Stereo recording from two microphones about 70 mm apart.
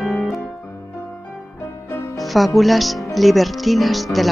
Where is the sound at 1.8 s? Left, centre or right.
Left.